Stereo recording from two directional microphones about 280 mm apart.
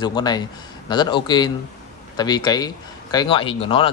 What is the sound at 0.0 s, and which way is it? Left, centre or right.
Speech, centre.